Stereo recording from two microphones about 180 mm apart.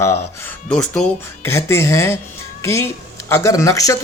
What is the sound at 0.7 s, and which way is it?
A woman's voice, 5° left (ahead or behind).